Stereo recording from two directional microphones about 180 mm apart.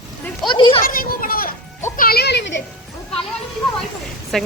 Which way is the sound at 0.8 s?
55° left (ahead or behind).